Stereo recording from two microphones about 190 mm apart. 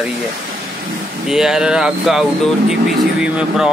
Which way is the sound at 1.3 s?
Centre (ahead or behind).